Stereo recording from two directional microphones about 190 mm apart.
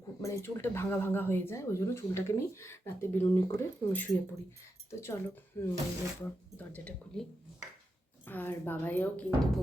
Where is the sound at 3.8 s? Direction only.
20° left (ahead or behind).